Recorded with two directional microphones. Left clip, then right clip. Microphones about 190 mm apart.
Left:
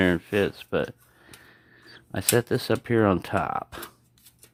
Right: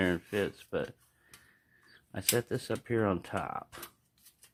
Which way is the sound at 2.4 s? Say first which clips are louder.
Left 9 dB; 30° left (ahead or behind).